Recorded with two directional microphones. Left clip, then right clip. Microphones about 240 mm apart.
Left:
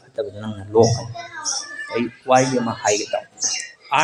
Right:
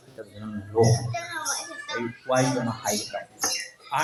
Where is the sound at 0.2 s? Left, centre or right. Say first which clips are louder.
Left 16 dB; left.